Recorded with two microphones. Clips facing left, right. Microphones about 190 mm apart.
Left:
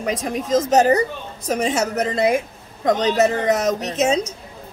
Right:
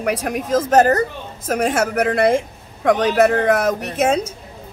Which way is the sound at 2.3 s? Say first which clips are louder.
Right 2 dB; 70° right (ahead or behind).